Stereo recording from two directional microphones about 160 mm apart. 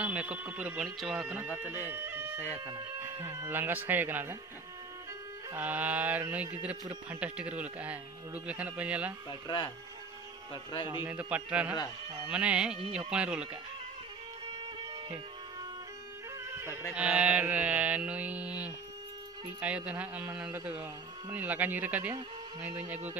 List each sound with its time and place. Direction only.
0.0 s speech: 10° right (ahead or behind)
1.9 s a sound: 15° right (ahead or behind)
3.0 s speech: 15° right (ahead or behind)
5.5 s speech: 10° right (ahead or behind)
9.3 s a man's voice: 30° left (ahead or behind)
11.1 s speech: 10° right (ahead or behind)
16.5 s a sound: 15° right (ahead or behind)
16.9 s speech: 5° right (ahead or behind)